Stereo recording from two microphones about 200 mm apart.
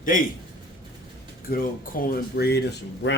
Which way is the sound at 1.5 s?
45° left (ahead or behind).